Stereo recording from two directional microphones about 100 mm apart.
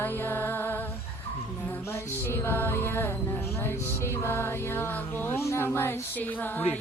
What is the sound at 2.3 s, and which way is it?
Music, 20° left (ahead or behind).